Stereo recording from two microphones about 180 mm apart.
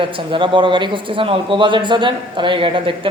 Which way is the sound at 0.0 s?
30° right (ahead or behind).